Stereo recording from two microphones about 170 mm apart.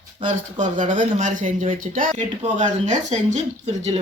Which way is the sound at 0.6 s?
50° right (ahead or behind).